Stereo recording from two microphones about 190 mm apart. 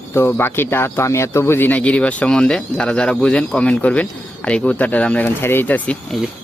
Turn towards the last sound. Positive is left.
turn(degrees=5)  # may be behind; listen again after turning